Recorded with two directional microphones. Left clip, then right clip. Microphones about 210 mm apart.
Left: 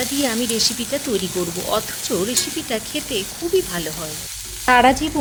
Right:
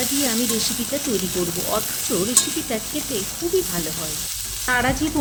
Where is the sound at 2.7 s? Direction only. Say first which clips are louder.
Left 5 dB; 30° left (ahead or behind).